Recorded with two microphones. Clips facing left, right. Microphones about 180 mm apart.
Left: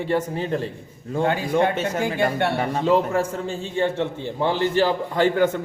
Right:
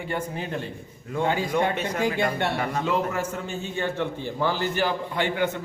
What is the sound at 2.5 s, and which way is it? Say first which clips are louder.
A man's voice: left 5 dB; 30° left (ahead or behind).